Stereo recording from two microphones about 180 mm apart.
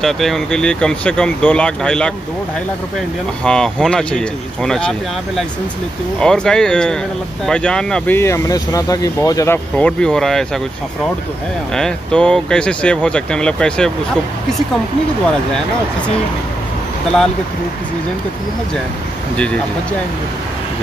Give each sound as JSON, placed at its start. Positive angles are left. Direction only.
{"t": 0.0, "sound": "speech", "side_deg": 0}
{"t": 3.4, "sound": "speech", "side_deg": 5}
{"t": 8.2, "sound": "speech", "side_deg": 20}
{"t": 9.8, "sound": "speech", "side_deg": 5}
{"t": 11.7, "sound": "speech", "side_deg": 5}
{"t": 19.3, "sound": "speech", "side_deg": 5}